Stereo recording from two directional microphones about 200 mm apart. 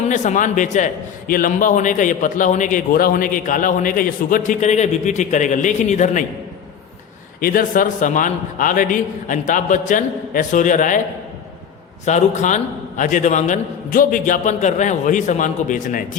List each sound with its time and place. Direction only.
0.0 s a man's voice: 35° left (ahead or behind)
7.4 s a man's voice: 45° left (ahead or behind)
12.0 s a man's voice: 35° left (ahead or behind)